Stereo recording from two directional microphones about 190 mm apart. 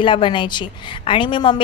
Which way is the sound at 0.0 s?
25° left (ahead or behind).